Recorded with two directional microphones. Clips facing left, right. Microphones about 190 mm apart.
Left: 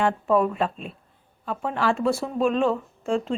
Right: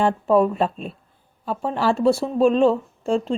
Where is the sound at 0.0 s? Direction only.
30° right (ahead or behind).